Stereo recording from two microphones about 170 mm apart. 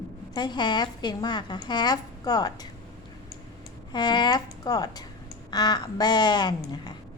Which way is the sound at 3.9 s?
25° left (ahead or behind).